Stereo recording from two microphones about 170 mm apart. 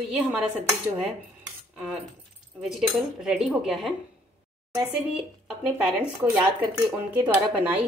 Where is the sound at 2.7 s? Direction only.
Centre (ahead or behind).